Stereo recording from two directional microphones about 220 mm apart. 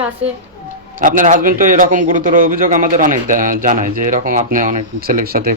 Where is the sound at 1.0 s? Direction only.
35° right (ahead or behind).